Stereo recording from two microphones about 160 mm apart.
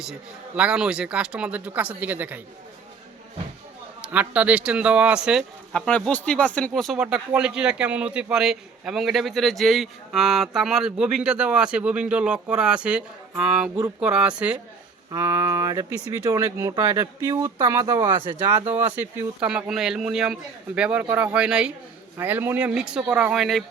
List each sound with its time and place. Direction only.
0.0 s speech: 5° right (ahead or behind)
4.0 s speech: 10° right (ahead or behind)
15.1 s speech: 20° right (ahead or behind)
18.3 s speech: 15° right (ahead or behind)